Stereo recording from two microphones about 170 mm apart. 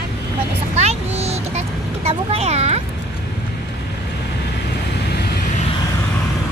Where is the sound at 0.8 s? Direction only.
40° right (ahead or behind).